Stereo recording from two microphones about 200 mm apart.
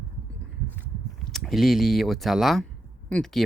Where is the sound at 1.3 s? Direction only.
Centre (ahead or behind).